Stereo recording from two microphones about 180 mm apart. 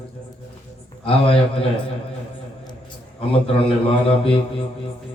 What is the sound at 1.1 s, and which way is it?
Speech, 30° left (ahead or behind).